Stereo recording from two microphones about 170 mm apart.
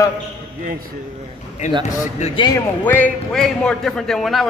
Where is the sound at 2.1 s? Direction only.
40° left (ahead or behind).